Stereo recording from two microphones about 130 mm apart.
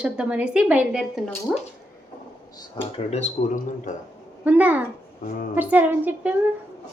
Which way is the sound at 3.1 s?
65° left (ahead or behind).